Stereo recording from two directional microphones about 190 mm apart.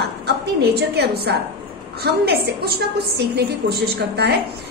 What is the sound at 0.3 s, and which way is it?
A woman's voice, 60° right (ahead or behind).